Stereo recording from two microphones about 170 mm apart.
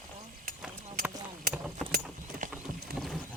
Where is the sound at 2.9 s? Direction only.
65° right (ahead or behind).